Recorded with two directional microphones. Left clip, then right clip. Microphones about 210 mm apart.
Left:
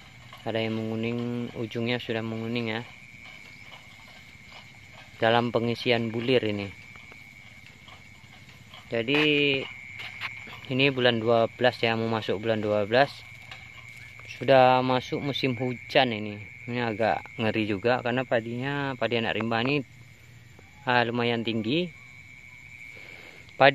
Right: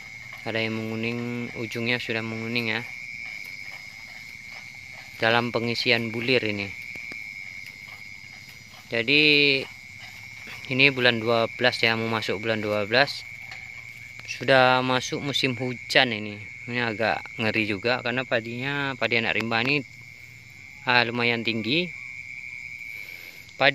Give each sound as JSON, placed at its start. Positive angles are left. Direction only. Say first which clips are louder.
{"t": 0.4, "sound": "speech", "louder": "right 1 dB", "side_deg": 0}
{"t": 5.2, "sound": "speech", "louder": "right 1 dB", "side_deg": 5}
{"t": 8.9, "sound": "speech", "louder": "right 4 dB", "side_deg": 0}
{"t": 10.7, "sound": "speech", "louder": "right 3 dB", "side_deg": 0}
{"t": 14.3, "sound": "speech", "louder": "even", "side_deg": 0}
{"t": 23.6, "sound": "speech", "louder": "left 2 dB", "side_deg": 15}